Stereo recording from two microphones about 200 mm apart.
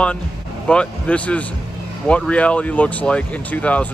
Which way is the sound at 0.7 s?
5° left (ahead or behind).